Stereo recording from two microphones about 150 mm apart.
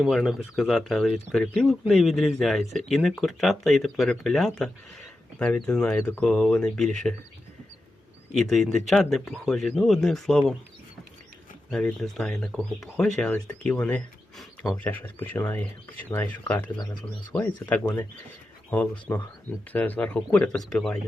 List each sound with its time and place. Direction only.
0.0 s speech: centre (ahead or behind)
8.3 s speech: centre (ahead or behind)
11.7 s speech: 5° left (ahead or behind)
14.8 s speech: 10° left (ahead or behind)
16.7 s speech: 30° left (ahead or behind)
17.3 s speech: 10° left (ahead or behind)